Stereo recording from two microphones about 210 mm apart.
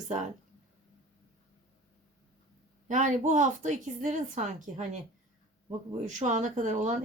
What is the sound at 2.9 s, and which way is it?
A woman's voice, 35° right (ahead or behind).